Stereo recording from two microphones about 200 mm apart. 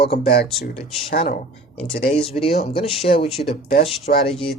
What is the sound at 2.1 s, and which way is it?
Speech, 30° left (ahead or behind).